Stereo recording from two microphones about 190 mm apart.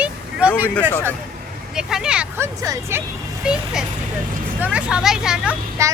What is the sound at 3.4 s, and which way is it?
Speech, 5° right (ahead or behind).